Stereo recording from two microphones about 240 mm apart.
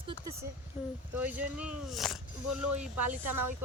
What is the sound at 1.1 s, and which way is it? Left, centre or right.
Speech, centre.